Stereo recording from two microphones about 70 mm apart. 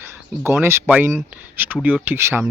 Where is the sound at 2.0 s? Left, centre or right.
Right.